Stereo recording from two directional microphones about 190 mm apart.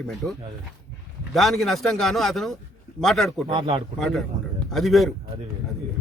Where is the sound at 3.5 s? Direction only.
25° right (ahead or behind).